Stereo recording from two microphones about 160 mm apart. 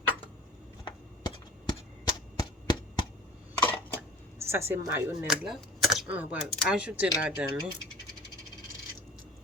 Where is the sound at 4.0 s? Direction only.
15° right (ahead or behind).